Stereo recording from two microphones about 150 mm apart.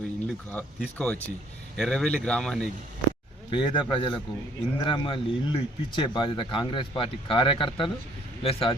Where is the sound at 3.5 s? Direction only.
35° left (ahead or behind).